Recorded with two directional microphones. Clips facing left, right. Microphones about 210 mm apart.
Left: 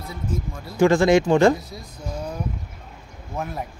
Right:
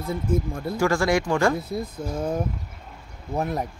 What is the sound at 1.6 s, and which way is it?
Speech, 55° right (ahead or behind).